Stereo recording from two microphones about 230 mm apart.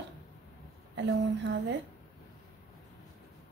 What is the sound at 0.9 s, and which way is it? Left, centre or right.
Speech, right.